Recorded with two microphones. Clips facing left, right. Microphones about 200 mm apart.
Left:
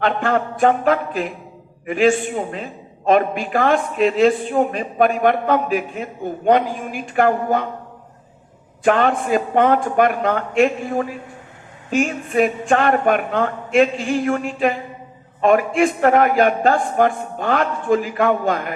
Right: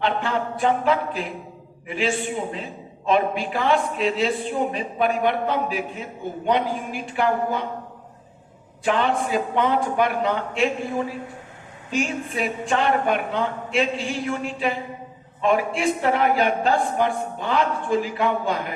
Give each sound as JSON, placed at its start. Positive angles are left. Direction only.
{"t": 0.0, "sound": "a man's voice", "side_deg": 55}
{"t": 8.8, "sound": "a man's voice", "side_deg": 50}